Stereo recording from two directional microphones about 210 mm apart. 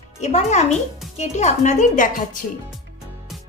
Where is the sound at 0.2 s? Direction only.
35° left (ahead or behind).